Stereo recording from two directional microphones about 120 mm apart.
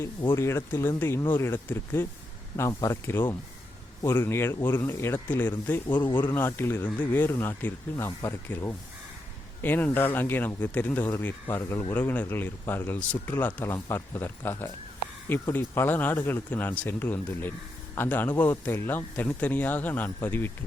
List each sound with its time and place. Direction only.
0.3 s speech: 20° left (ahead or behind)
6.0 s speech: 40° left (ahead or behind)
6.2 s speech: 20° left (ahead or behind)